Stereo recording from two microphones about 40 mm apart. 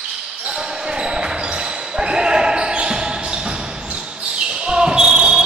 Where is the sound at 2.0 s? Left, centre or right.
Centre.